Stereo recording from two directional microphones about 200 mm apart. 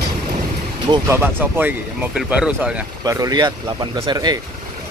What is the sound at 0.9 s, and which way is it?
Speech, 10° right (ahead or behind).